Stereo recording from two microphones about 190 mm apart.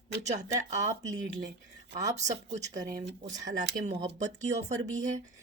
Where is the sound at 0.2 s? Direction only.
40° right (ahead or behind).